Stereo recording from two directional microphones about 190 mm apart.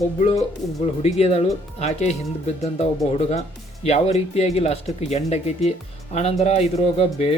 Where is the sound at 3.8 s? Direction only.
35° left (ahead or behind).